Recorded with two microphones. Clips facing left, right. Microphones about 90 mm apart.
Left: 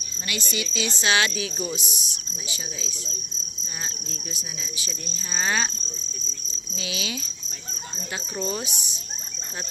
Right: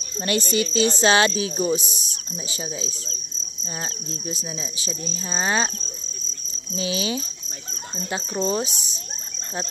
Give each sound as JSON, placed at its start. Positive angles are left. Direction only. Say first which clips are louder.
{"t": 0.2, "sound": "speech", "louder": "right 9 dB", "side_deg": -45}
{"t": 3.6, "sound": "cricket", "louder": "right 5 dB", "side_deg": -30}
{"t": 6.7, "sound": "speech", "louder": "right 7 dB", "side_deg": -30}